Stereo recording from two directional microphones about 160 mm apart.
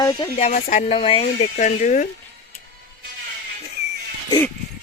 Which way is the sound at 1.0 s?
35° left (ahead or behind).